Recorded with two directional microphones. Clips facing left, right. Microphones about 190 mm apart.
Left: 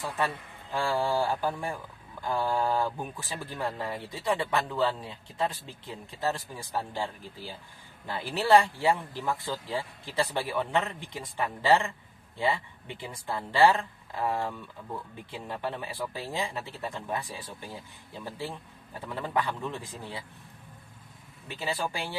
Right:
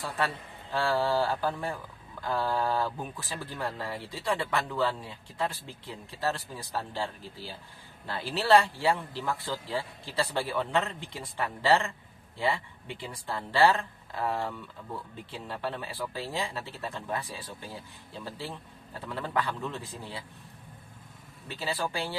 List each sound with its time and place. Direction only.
0.7 s speech: 15° left (ahead or behind)
21.4 s speech: 15° left (ahead or behind)